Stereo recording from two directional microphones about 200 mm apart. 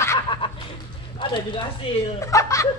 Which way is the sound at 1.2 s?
25° left (ahead or behind).